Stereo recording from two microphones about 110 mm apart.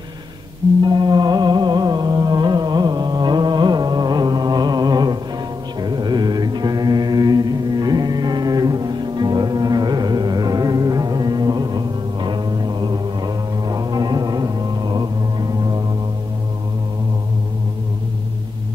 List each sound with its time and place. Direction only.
0.8 s music: 40° right (ahead or behind)
5.8 s mantra: 40° right (ahead or behind)